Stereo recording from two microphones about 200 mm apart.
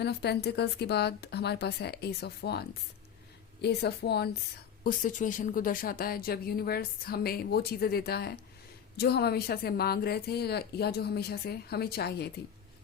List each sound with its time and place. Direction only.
0.0 s speech: 55° left (ahead or behind)
4.8 s speech: 45° left (ahead or behind)